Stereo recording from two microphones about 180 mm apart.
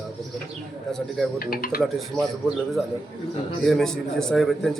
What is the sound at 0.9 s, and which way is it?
Speech, 5° left (ahead or behind).